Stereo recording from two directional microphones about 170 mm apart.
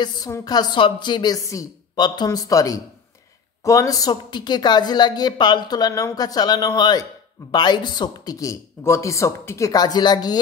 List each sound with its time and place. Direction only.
0.0 s speech: 25° left (ahead or behind)